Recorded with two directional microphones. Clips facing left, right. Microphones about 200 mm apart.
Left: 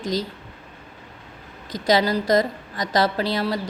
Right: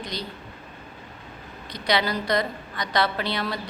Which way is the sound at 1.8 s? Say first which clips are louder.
Left 5 dB; 40° left (ahead or behind).